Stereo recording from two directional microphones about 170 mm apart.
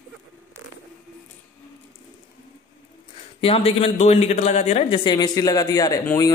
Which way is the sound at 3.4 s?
35° left (ahead or behind).